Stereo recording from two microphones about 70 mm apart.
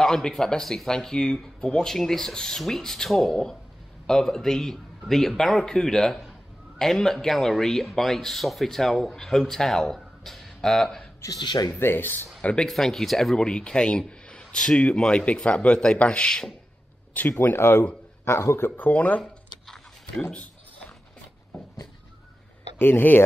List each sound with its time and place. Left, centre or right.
0.0 s a man's voice: centre
11.2 s speech: left
11.8 s speech: left
12.4 s speech: centre
12.6 s a man's voice: centre
17.4 s speech: left
18.8 s speech: left
20.2 s a sound: left
22.8 s speech: left